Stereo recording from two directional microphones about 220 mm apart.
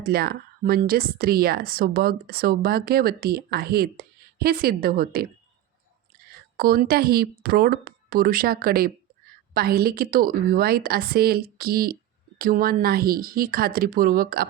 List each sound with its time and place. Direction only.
0.0 s speech: 45° right (ahead or behind)
6.6 s a woman's voice: 45° right (ahead or behind)